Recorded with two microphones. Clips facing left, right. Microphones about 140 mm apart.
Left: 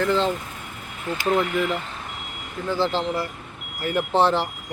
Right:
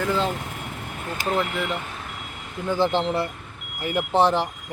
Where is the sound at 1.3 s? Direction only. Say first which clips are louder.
Left 3 dB; centre (ahead or behind).